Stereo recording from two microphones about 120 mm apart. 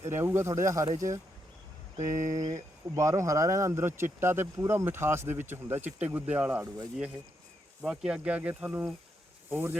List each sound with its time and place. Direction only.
0.0 s speech: 20° right (ahead or behind)
2.3 s speech: 30° right (ahead or behind)